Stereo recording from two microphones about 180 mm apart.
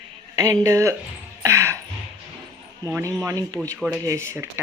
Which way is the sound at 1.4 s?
15° right (ahead or behind).